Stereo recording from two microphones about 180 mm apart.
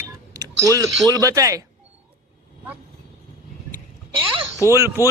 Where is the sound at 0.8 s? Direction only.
20° right (ahead or behind).